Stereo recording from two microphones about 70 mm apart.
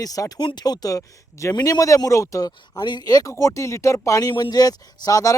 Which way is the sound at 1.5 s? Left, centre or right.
Left.